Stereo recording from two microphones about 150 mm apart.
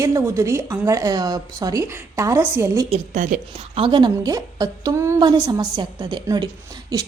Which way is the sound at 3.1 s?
60° right (ahead or behind).